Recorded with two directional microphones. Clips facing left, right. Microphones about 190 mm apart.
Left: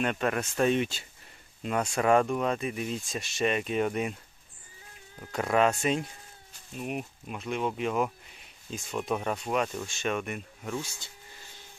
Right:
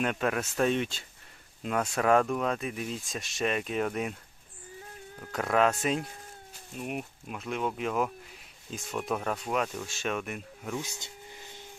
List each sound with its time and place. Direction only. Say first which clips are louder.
0.0 s speech: left 1 dB; centre (ahead or behind)
5.2 s speech: left 1 dB; centre (ahead or behind)
10.8 s a sound: even; 20° right (ahead or behind)